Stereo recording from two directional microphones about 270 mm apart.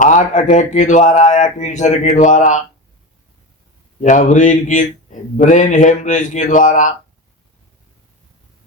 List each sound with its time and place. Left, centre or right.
0.0 s speech: left
4.0 s speech: left